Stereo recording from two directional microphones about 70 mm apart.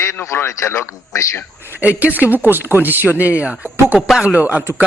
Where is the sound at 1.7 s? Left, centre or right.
Right.